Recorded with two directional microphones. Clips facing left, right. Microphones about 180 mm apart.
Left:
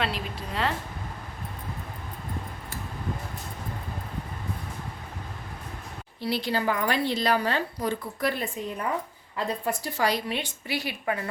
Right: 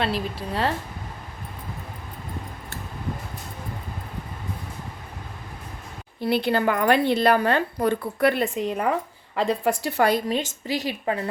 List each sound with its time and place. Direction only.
0.0 s speech: 35° right (ahead or behind)
6.1 s a woman's voice: 55° right (ahead or behind); by 11.3 s 30° right (ahead or behind)